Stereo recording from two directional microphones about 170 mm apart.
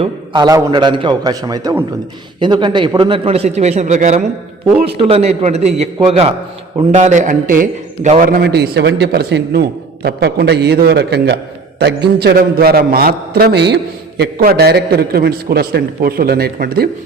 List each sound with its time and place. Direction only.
0.0 s a man's voice: 25° right (ahead or behind)
6.9 s a man's voice: 45° right (ahead or behind); by 13.7 s 80° right
14.2 s a man's voice: 65° right (ahead or behind)